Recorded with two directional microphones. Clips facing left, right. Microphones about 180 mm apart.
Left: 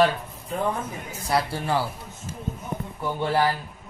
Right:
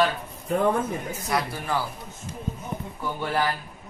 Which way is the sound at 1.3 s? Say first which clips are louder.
Left 3 dB; 30° left (ahead or behind).